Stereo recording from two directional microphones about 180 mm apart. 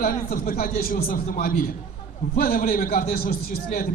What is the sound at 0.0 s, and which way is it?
A man's voice, 50° left (ahead or behind).